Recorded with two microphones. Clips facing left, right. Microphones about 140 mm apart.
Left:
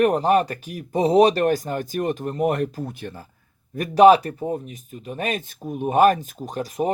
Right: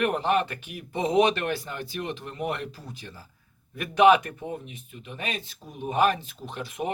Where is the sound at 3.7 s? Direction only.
40° left (ahead or behind).